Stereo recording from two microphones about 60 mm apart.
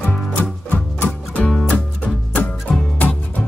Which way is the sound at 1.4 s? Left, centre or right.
Centre.